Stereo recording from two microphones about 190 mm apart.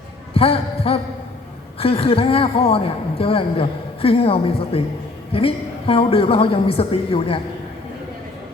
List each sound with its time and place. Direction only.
0.3 s a man's voice: 30° left (ahead or behind)